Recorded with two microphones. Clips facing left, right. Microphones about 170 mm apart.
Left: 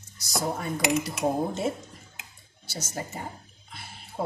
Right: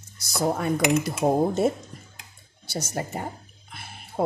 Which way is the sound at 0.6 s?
50° right (ahead or behind).